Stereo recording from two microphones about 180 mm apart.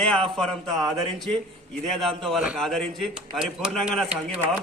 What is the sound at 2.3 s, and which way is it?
A man's voice, 5° right (ahead or behind).